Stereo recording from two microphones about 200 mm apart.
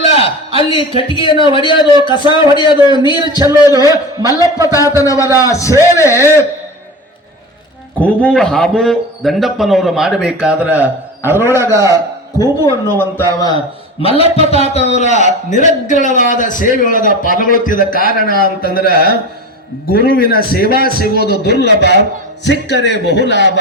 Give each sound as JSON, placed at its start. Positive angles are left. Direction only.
{"t": 0.0, "sound": "a man's voice", "side_deg": 30}
{"t": 3.3, "sound": "a man's voice", "side_deg": -15}
{"t": 3.8, "sound": "a man's voice", "side_deg": 15}
{"t": 7.9, "sound": "a man's voice", "side_deg": 5}
{"t": 12.9, "sound": "a man's voice", "side_deg": 10}
{"t": 14.2, "sound": "a man's voice", "side_deg": 30}